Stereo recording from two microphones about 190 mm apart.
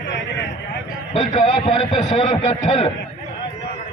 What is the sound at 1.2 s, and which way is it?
A man's voice, 30° left (ahead or behind).